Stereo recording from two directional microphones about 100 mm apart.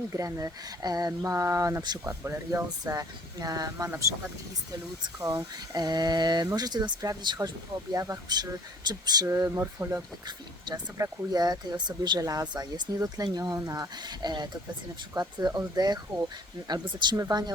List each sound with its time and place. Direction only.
0.1 s speech: 35° right (ahead or behind)
2.6 s speech: 40° right (ahead or behind)
3.8 s speech: 25° right (ahead or behind)
5.2 s speech: 40° right (ahead or behind)
7.9 s speech: 30° right (ahead or behind)
8.9 s speech: 45° right (ahead or behind)
9.2 s speech: 25° right (ahead or behind); by 17.2 s 50° right (ahead or behind)
17.2 s speech: 40° right (ahead or behind)